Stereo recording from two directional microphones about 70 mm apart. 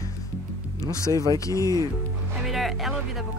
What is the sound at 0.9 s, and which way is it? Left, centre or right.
Speech, left.